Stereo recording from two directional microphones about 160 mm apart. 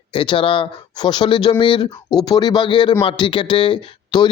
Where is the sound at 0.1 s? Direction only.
35° left (ahead or behind).